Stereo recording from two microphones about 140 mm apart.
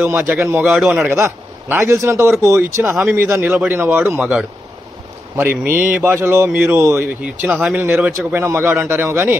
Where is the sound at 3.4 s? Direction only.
5° right (ahead or behind).